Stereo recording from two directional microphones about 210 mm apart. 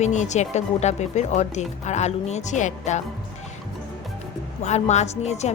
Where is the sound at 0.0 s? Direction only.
35° left (ahead or behind).